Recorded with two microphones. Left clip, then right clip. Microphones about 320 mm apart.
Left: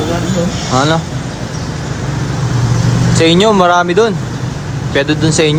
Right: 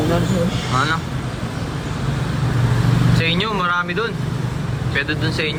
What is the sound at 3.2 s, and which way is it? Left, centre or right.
Speech, centre.